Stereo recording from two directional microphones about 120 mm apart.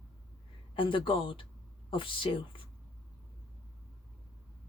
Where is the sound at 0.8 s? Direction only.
45° left (ahead or behind).